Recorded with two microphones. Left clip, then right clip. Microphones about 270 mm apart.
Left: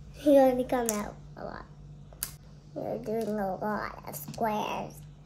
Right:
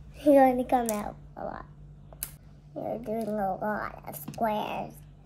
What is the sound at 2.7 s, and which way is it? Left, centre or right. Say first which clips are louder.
Speech: even; centre.